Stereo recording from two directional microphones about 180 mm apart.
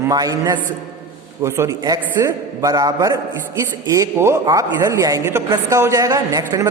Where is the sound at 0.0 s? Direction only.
20° right (ahead or behind).